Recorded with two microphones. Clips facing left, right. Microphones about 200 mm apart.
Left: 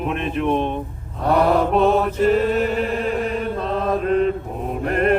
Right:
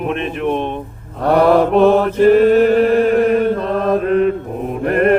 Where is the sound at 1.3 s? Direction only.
65° right (ahead or behind).